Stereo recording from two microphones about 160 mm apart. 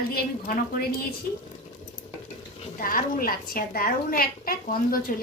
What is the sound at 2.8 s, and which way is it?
A woman's voice, 60° left (ahead or behind).